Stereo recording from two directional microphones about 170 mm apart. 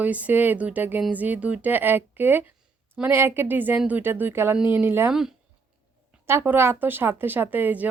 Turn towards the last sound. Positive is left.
turn(degrees=-10)  # may be behind; listen again after turning